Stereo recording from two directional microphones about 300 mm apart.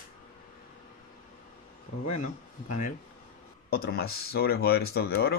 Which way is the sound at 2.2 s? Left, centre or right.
Left.